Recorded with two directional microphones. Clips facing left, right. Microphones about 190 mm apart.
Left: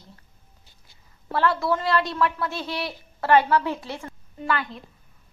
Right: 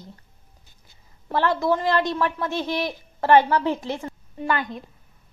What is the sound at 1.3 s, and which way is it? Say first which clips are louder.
A woman's voice: right 2 dB; 20° right (ahead or behind).